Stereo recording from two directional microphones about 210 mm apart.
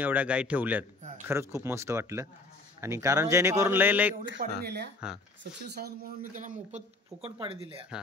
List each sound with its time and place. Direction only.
0.0 s speech: 5° right (ahead or behind)
4.4 s speech: 50° right (ahead or behind); by 7.8 s 25° right (ahead or behind)